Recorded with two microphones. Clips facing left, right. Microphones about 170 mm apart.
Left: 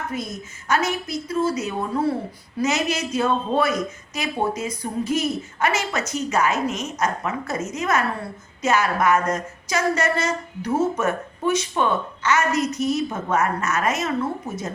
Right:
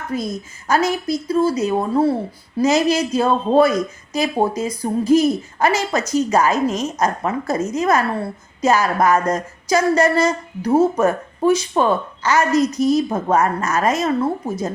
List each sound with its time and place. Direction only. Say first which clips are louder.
0.1 s speech: right 6 dB; 35° right (ahead or behind)